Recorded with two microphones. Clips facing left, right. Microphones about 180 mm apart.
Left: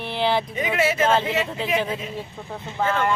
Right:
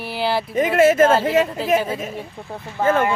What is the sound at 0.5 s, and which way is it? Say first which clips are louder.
Speech: right 8 dB; 50° right (ahead or behind).